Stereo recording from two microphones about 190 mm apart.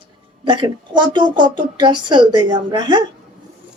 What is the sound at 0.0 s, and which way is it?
A woman's voice, 25° right (ahead or behind).